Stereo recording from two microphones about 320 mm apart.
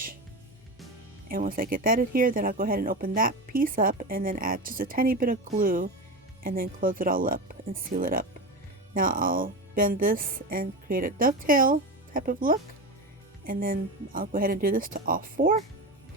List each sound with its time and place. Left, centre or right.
1.3 s speech: right